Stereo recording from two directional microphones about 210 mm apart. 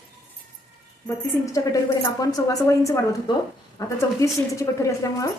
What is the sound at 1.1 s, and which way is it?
Speech, 10° left (ahead or behind).